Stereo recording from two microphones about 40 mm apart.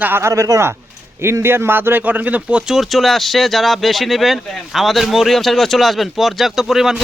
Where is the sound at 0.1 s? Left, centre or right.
Right.